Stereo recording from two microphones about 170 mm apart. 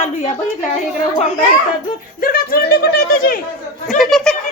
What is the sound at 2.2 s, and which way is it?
Speech, 60° left (ahead or behind).